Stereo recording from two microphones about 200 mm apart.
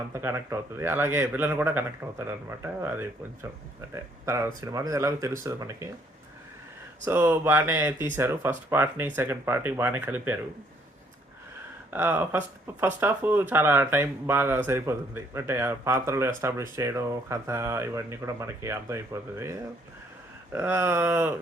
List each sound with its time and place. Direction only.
0.1 s speech: 10° right (ahead or behind)
7.0 s speech: 10° right (ahead or behind)
11.9 s speech: 10° right (ahead or behind)